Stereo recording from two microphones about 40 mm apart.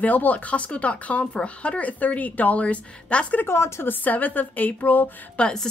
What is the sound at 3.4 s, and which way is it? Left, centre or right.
Speech, left.